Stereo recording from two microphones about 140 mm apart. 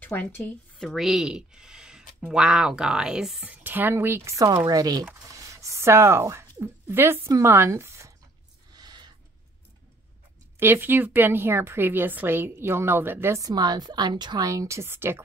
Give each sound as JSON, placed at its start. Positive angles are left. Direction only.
{"t": 0.0, "sound": "speech", "side_deg": 10}
{"t": 8.7, "sound": "a sound", "side_deg": -30}
{"t": 10.6, "sound": "speech", "side_deg": -15}